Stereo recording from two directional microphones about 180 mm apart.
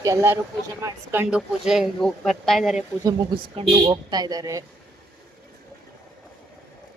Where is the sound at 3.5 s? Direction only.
25° right (ahead or behind).